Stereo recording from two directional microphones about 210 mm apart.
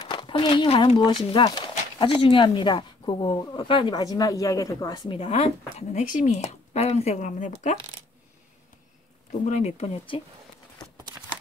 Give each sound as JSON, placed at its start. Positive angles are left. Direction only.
{"t": 0.0, "sound": "speech", "side_deg": 20}
{"t": 9.4, "sound": "speech", "side_deg": 35}
{"t": 10.8, "sound": "clip-clop", "side_deg": 20}